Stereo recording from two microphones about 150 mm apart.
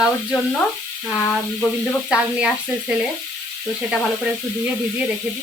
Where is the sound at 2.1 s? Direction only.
5° right (ahead or behind).